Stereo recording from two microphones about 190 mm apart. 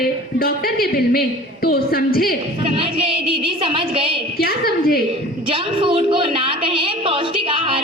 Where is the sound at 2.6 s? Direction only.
30° right (ahead or behind).